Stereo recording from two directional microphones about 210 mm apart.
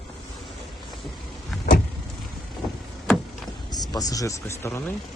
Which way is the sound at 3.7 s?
20° left (ahead or behind).